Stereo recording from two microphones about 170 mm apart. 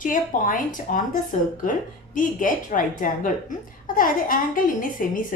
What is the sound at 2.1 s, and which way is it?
A woman's voice, 50° left (ahead or behind).